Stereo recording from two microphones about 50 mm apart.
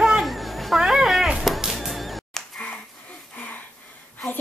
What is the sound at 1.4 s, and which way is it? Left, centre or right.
Music, centre.